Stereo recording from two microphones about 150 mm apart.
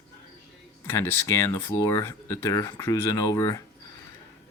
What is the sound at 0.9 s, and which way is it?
Speech, 15° left (ahead or behind).